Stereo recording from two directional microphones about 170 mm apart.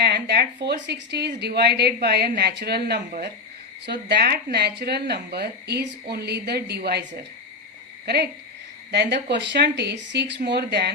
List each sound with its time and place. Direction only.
0.0 s speech: 70° right (ahead or behind)
8.0 s speech: 70° right (ahead or behind)